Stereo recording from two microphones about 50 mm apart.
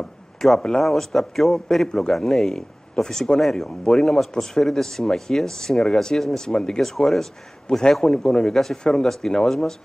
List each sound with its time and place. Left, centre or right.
0.0 s a sound: centre
0.8 s a man's voice: centre
1.9 s speech: centre
2.1 s a man's voice: centre